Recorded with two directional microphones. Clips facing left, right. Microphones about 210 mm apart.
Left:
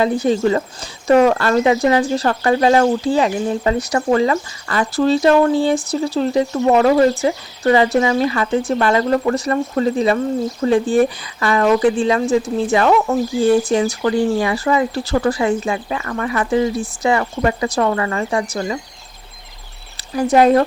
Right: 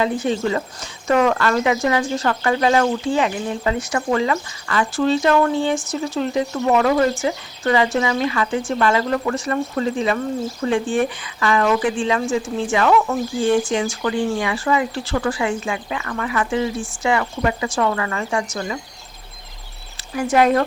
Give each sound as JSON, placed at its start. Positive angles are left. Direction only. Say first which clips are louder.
{"t": 0.0, "sound": "speech", "louder": "left 4 dB", "side_deg": 35}
{"t": 20.1, "sound": "speech", "louder": "left 4 dB", "side_deg": 35}